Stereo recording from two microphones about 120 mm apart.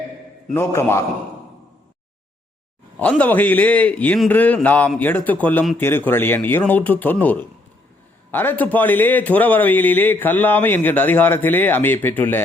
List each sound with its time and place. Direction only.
0.5 s a man's voice: 20° left (ahead or behind)
3.0 s a man's voice: 10° left (ahead or behind)